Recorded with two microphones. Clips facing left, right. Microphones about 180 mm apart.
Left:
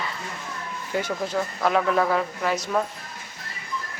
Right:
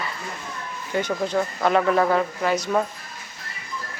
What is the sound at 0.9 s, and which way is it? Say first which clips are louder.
A man's voice: right 3 dB; 5° left (ahead or behind).